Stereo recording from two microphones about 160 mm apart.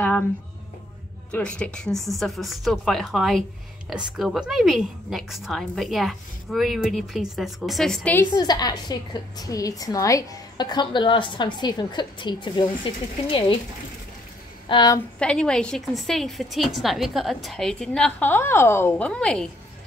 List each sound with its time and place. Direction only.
1.3 s a woman's voice: 5° left (ahead or behind)
8.3 s a woman's voice: 25° left (ahead or behind)
14.7 s a woman's voice: 25° left (ahead or behind)
15.1 s a woman's voice: 5° left (ahead or behind)